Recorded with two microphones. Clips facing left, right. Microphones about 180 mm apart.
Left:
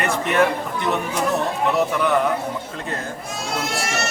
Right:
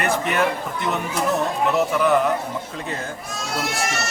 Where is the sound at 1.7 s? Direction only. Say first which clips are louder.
Right 2 dB; centre (ahead or behind).